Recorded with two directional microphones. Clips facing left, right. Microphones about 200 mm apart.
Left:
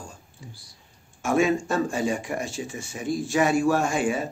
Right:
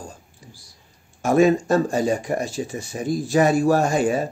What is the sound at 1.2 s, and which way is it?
Speech, 40° right (ahead or behind).